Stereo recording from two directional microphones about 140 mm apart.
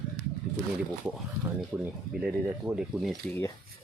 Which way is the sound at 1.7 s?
5° right (ahead or behind).